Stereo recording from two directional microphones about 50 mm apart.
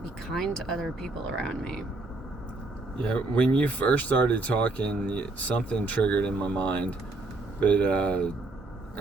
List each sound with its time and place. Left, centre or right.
0.3 s speech: centre
3.1 s speech: left